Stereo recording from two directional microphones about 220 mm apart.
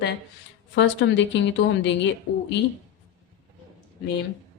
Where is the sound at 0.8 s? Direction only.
55° left (ahead or behind).